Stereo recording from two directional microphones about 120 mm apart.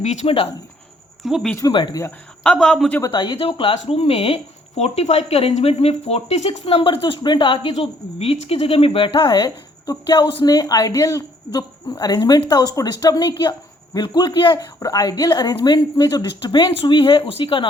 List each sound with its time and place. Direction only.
0.0 s speech: 70° left (ahead or behind)
0.3 s speech: 50° left (ahead or behind)
1.2 s speech: centre (ahead or behind)
1.7 s speech: 35° left (ahead or behind)
2.4 s speech: 5° left (ahead or behind)
3.1 s speech: 40° left (ahead or behind)